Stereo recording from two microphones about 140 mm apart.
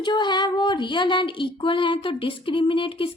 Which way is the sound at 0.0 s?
30° left (ahead or behind).